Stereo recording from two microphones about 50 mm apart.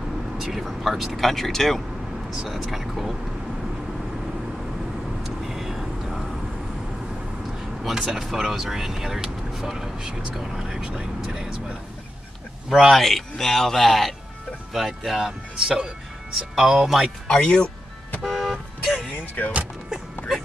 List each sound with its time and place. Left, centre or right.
0.4 s speech: centre
5.2 s vehicle: centre
7.8 s speech: centre
10.8 s speech: right
12.9 s speech: centre
17.3 s speech: centre
18.2 s vehicle: centre
19.4 s speech: left